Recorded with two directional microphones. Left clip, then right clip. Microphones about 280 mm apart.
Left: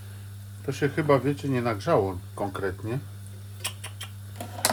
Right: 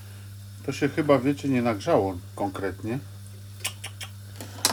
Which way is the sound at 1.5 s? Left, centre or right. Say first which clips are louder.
Right 2 dB; centre.